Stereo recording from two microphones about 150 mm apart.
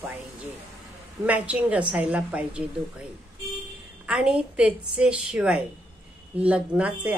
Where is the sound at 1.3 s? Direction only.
10° right (ahead or behind).